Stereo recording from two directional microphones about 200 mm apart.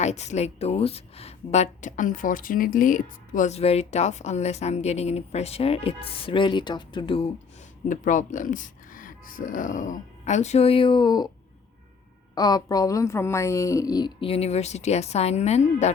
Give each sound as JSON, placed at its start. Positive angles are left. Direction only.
{"t": 0.0, "sound": "a woman's voice", "side_deg": 35}
{"t": 7.9, "sound": "a woman's voice", "side_deg": 40}
{"t": 12.3, "sound": "speech", "side_deg": 20}